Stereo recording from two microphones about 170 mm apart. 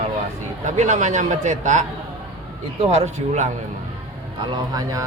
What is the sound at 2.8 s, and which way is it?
Speech, 45° right (ahead or behind).